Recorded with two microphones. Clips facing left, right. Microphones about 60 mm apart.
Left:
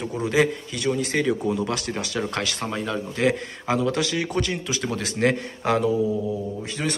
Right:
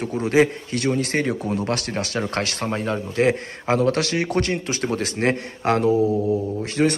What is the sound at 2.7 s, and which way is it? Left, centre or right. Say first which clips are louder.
Speech: right 3 dB; right.